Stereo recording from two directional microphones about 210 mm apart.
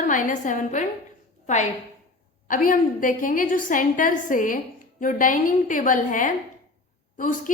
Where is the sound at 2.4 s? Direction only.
40° left (ahead or behind).